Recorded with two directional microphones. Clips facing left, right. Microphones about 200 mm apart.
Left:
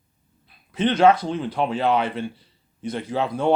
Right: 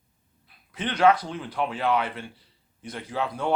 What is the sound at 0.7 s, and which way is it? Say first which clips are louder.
Speech: left 4 dB; 25° left (ahead or behind).